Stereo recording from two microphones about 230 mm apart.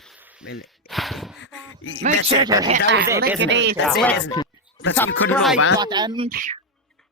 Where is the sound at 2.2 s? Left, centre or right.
Centre.